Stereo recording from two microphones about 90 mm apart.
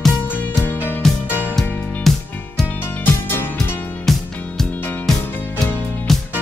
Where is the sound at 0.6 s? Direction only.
20° left (ahead or behind).